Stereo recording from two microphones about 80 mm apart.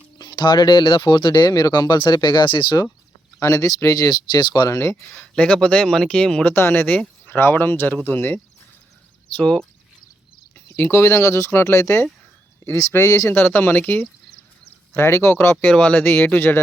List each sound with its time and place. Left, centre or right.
0.2 s speech: left
3.4 s speech: left
4.7 s speech: left
5.0 s speech: left
5.3 s speech: centre
6.4 s speech: left
9.3 s speech: centre
10.5 s speech: left
13.4 s speech: left
15.8 s speech: left